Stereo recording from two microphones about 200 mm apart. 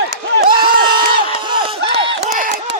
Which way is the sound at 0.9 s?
25° right (ahead or behind).